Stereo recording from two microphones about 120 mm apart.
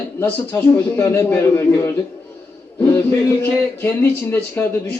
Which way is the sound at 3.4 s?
15° left (ahead or behind).